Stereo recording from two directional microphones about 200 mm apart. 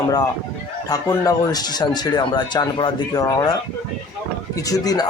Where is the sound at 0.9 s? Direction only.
15° left (ahead or behind).